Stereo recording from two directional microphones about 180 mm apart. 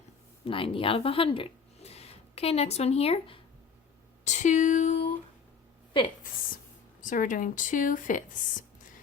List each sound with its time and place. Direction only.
0.4 s speech: 30° left (ahead or behind)
4.2 s a sound: 40° left (ahead or behind)
7.0 s speech: 45° left (ahead or behind)